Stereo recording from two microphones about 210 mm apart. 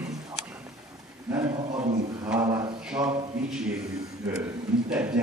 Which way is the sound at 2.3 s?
10° right (ahead or behind).